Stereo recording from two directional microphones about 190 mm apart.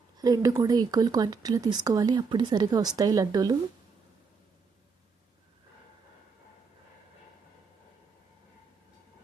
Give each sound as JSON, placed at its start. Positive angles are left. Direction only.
{"t": 0.2, "sound": "speech", "side_deg": -20}